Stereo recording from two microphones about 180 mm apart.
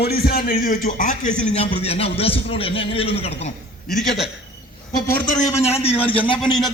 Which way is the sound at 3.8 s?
Centre (ahead or behind).